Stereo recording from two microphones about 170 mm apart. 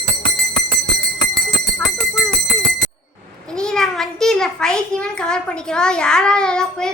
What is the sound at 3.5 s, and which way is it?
A child's voice, 5° left (ahead or behind).